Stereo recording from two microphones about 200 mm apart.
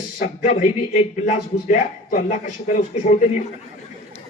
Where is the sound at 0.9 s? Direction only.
35° left (ahead or behind).